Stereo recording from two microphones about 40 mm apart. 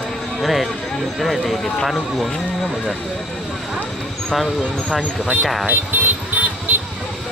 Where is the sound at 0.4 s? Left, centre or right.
Centre.